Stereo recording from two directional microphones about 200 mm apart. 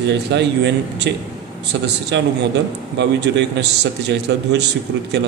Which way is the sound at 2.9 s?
60° right (ahead or behind).